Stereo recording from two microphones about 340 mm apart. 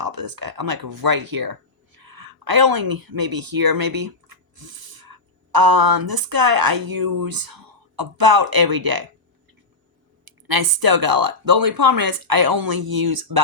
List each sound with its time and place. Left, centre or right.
0.0 s speech: right
10.2 s speech: right